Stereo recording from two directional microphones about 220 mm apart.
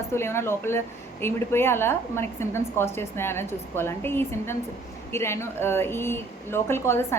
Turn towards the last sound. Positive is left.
turn(degrees=10)  # may be behind; listen again after turning